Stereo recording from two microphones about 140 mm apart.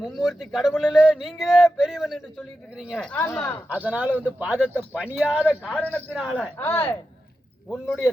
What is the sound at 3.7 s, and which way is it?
A man's voice, 10° right (ahead or behind).